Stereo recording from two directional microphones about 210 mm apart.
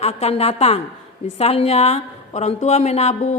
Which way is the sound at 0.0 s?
30° left (ahead or behind).